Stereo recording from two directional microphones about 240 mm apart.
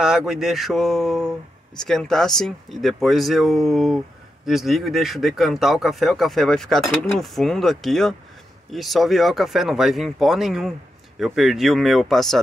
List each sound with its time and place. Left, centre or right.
0.0 s speech: centre